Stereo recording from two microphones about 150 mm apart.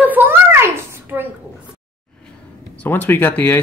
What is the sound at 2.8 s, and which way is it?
Speech, 15° left (ahead or behind).